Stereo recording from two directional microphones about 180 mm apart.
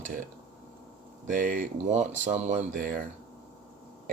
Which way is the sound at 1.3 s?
45° right (ahead or behind).